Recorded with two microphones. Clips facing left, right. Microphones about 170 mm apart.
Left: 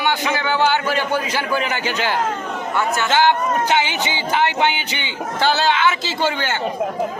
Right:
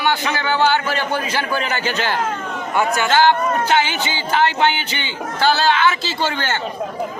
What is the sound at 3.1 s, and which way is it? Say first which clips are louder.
Music: right 1 dB; 15° left (ahead or behind).